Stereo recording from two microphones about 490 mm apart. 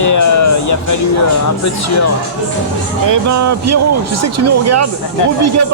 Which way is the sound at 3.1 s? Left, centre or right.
Right.